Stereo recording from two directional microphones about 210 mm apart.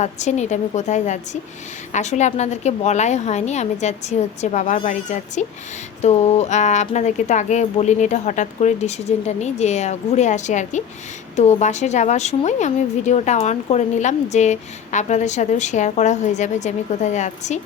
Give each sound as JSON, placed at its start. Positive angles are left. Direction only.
{"t": 0.0, "sound": "a woman's voice", "side_deg": 35}